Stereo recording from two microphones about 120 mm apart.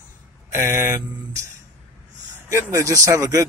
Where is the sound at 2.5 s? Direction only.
25° right (ahead or behind).